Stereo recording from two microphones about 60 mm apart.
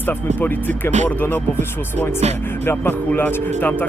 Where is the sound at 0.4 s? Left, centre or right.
Left.